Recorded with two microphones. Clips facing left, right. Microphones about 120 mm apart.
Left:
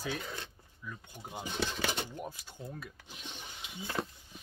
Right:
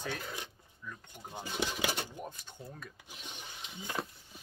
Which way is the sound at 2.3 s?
10° left (ahead or behind).